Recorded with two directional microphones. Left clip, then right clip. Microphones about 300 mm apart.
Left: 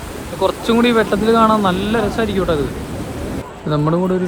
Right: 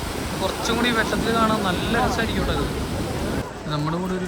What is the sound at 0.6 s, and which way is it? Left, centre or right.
Speech, centre.